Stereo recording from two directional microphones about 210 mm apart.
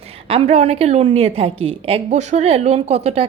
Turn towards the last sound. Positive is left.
turn(degrees=-30)  # may be behind; listen again after turning